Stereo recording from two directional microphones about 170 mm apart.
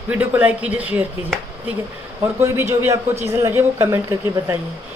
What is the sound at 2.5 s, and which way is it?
Speech, 15° right (ahead or behind).